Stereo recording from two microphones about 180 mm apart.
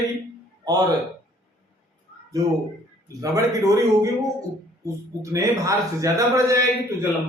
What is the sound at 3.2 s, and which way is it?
Speech, 20° right (ahead or behind).